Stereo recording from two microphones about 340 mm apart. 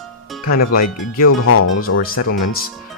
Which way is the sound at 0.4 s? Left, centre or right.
Left.